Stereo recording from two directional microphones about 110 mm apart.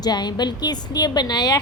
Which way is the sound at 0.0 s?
40° left (ahead or behind).